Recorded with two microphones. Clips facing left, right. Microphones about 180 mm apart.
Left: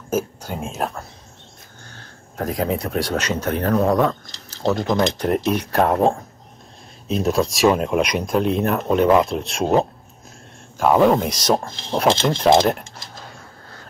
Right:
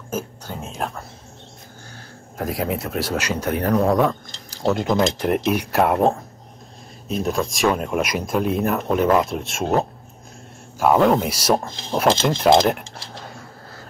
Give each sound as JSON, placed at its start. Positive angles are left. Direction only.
{"t": 0.1, "sound": "speech", "side_deg": 10}
{"t": 2.0, "sound": "speech", "side_deg": -5}
{"t": 3.7, "sound": "speech", "side_deg": 0}
{"t": 7.2, "sound": "speech", "side_deg": 0}
{"t": 10.8, "sound": "speech", "side_deg": 0}